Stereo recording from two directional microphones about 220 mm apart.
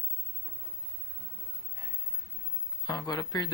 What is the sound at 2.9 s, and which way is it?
Speech, 15° left (ahead or behind).